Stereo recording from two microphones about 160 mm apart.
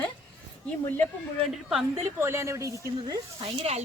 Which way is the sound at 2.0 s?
15° right (ahead or behind).